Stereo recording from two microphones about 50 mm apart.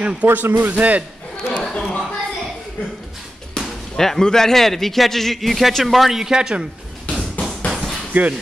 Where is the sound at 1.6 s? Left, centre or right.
Centre.